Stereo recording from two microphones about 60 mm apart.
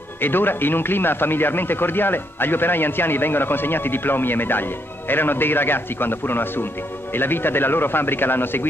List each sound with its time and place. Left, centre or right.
0.2 s speech: left